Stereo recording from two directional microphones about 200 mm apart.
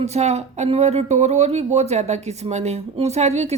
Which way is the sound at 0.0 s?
35° right (ahead or behind).